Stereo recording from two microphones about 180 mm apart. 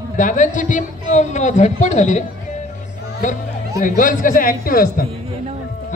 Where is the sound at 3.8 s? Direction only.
45° left (ahead or behind).